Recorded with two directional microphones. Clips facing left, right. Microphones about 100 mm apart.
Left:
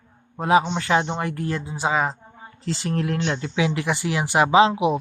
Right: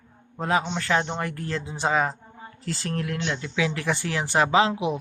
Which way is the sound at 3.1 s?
35° left (ahead or behind).